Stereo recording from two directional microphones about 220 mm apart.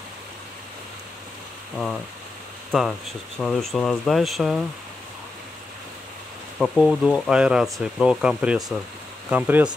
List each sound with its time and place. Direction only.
2.7 s speech: centre (ahead or behind)
6.6 s speech: centre (ahead or behind)